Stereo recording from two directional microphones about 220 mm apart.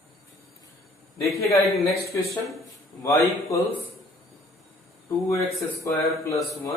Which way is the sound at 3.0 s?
15° left (ahead or behind).